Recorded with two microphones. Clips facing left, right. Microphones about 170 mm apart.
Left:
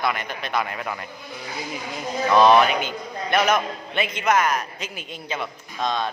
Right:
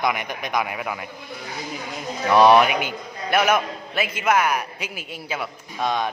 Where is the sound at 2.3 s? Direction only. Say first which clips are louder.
Right 1 dB; 15° right (ahead or behind).